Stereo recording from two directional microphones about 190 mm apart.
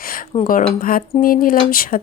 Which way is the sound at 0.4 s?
45° left (ahead or behind).